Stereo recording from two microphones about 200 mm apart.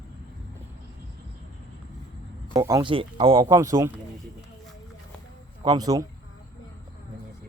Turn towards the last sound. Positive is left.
turn(degrees=-20)  # may be behind; listen again after turning